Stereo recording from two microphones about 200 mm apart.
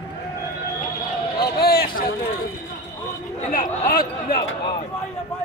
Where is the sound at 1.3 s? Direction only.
50° left (ahead or behind).